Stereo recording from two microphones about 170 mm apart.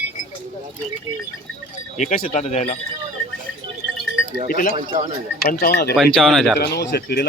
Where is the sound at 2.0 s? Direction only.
45° left (ahead or behind).